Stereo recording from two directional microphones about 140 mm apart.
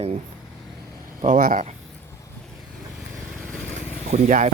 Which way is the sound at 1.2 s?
65° right (ahead or behind).